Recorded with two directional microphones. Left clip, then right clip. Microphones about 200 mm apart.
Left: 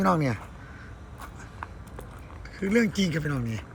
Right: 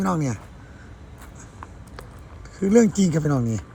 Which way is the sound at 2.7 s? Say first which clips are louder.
Right 7 dB; 50° left (ahead or behind).